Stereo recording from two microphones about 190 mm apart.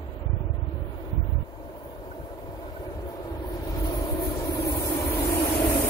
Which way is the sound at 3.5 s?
20° left (ahead or behind).